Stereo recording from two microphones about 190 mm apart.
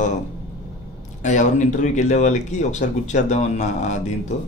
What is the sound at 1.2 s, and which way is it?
Speech, 40° left (ahead or behind).